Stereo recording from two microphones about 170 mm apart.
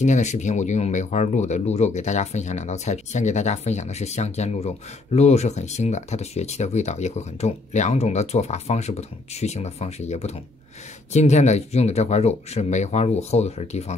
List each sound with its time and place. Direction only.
0.0 s speech: 45° left (ahead or behind)